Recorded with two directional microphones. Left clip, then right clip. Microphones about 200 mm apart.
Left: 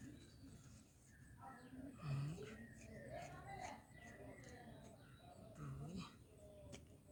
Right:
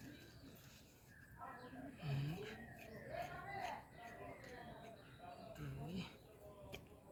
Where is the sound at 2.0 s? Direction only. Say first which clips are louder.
Right 3 dB; 20° left (ahead or behind).